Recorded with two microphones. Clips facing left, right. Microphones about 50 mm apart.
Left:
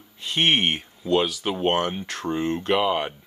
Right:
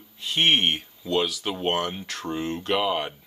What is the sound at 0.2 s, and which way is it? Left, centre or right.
Speech, centre.